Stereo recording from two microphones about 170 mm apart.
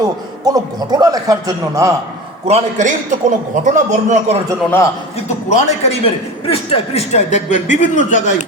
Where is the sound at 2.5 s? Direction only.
45° right (ahead or behind).